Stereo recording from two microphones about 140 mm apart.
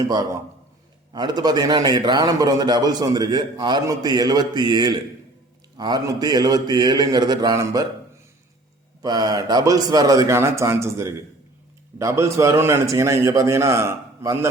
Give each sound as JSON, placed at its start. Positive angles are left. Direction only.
{"t": 1.1, "sound": "a man's voice", "side_deg": -30}
{"t": 9.0, "sound": "a man's voice", "side_deg": -30}